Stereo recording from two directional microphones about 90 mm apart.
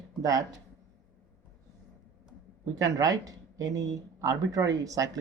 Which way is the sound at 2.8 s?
40° right (ahead or behind).